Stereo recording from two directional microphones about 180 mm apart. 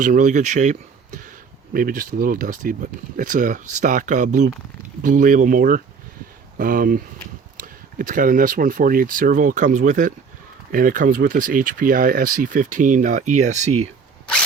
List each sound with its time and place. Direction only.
0.0 s speech: 45° right (ahead or behind)